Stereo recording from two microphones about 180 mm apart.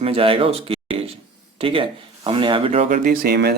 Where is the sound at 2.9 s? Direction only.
50° right (ahead or behind).